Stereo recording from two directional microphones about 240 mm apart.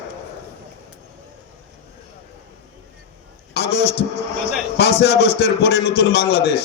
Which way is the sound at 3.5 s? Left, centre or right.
Left.